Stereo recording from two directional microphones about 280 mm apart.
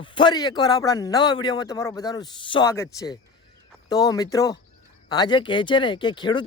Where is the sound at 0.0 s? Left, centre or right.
Centre.